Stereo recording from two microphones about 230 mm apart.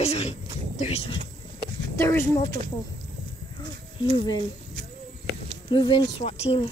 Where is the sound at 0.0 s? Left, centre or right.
Left.